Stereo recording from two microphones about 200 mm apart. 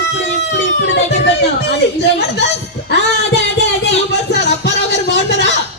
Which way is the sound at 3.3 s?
60° left (ahead or behind).